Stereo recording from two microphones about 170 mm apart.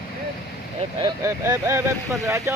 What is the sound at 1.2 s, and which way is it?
Speech, 15° right (ahead or behind).